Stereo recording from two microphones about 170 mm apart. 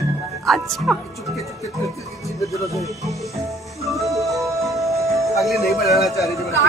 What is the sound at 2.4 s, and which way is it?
Speech, 20° left (ahead or behind).